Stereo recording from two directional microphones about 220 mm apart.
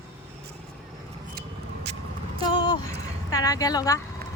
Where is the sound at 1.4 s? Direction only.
50° right (ahead or behind).